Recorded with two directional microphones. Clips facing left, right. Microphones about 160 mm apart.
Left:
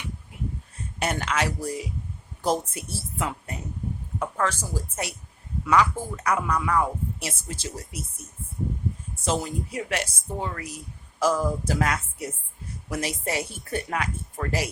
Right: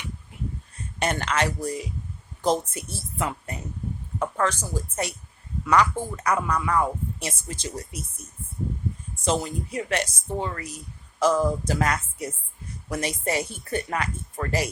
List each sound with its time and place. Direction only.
0.9 s speech: 5° left (ahead or behind)
9.2 s speech: 5° left (ahead or behind)